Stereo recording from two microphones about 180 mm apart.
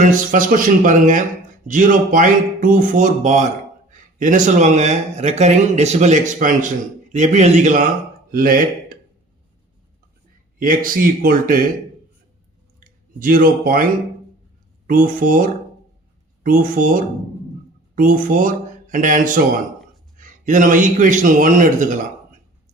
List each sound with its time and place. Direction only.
0.0 s a man's voice: 45° right (ahead or behind)
10.6 s a man's voice: 50° right (ahead or behind)
12.8 s speech: 50° right (ahead or behind)
14.8 s a man's voice: 50° right (ahead or behind)